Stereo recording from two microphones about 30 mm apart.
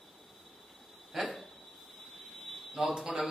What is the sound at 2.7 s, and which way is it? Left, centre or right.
Speech, centre.